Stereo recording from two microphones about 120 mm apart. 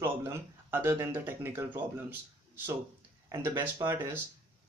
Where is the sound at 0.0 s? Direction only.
20° right (ahead or behind).